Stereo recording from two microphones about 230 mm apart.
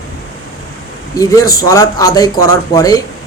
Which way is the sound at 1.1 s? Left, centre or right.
Centre.